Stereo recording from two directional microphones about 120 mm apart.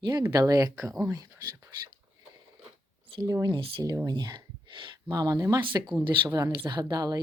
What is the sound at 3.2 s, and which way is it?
A woman's voice, 30° right (ahead or behind).